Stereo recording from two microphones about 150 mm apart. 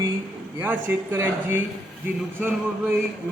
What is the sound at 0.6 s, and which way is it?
A man's voice, 15° right (ahead or behind).